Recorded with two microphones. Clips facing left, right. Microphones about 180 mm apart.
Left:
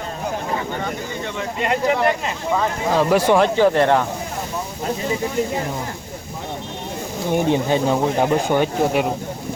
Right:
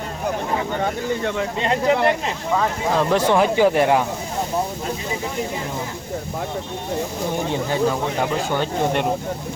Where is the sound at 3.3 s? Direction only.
10° right (ahead or behind).